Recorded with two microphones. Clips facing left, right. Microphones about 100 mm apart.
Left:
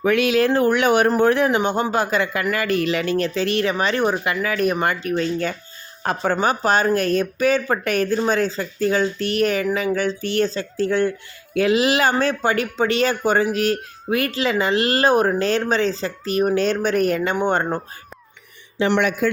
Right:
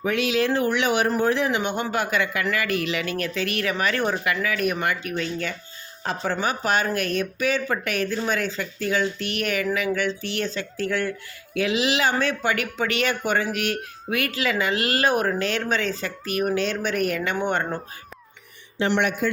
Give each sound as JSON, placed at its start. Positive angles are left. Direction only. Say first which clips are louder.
{"t": 0.0, "sound": "speech", "louder": "left 5 dB", "side_deg": 60}
{"t": 1.5, "sound": "speech", "louder": "left 5 dB", "side_deg": 40}
{"t": 6.0, "sound": "speech", "louder": "left 5 dB", "side_deg": 55}
{"t": 11.5, "sound": "speech", "louder": "left 5 dB", "side_deg": 45}
{"t": 12.3, "sound": "speech", "louder": "left 4 dB", "side_deg": 35}